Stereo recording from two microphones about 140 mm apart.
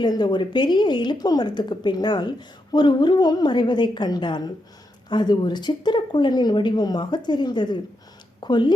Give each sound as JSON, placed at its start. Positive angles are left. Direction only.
{"t": 0.0, "sound": "speech", "side_deg": 30}